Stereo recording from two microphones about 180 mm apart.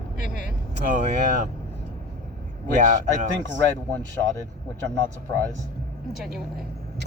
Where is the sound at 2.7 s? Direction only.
45° right (ahead or behind).